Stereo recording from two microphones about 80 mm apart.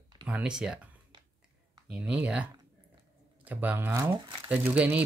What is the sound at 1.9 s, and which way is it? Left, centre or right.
Speech, centre.